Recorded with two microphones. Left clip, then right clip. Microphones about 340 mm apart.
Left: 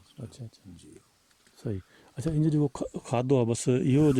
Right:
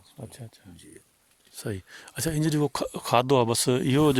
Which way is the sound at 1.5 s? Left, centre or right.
Right.